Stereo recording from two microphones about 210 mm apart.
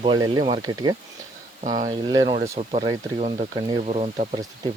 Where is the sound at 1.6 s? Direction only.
35° right (ahead or behind).